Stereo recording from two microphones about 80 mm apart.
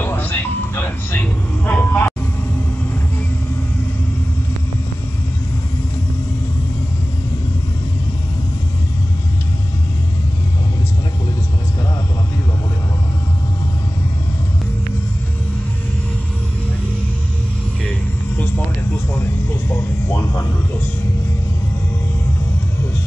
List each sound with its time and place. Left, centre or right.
0.0 s a sound: left
1.7 s vehicle: centre
18.4 s music: left